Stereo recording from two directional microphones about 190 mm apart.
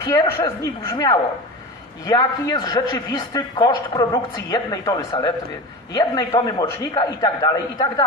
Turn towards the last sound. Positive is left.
turn(degrees=20)  # may be behind; listen again after turning